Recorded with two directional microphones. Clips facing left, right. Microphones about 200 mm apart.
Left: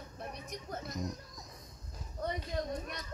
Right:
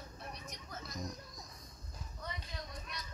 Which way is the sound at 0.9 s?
20° left (ahead or behind).